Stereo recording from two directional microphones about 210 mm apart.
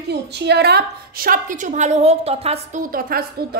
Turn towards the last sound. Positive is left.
turn(degrees=-45)  # may be behind; listen again after turning